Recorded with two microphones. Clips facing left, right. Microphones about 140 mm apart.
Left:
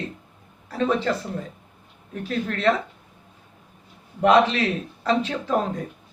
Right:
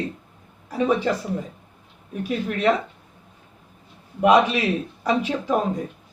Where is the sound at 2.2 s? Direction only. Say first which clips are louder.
Right 2 dB; 15° right (ahead or behind).